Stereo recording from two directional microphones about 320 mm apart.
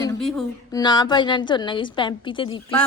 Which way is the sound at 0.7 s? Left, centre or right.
Centre.